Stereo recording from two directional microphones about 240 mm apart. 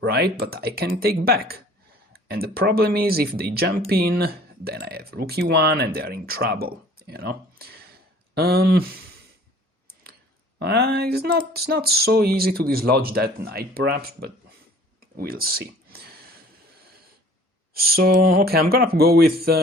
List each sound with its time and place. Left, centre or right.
0.0 s speech: right
9.8 s a sound: right
10.6 s speech: right
17.7 s speech: right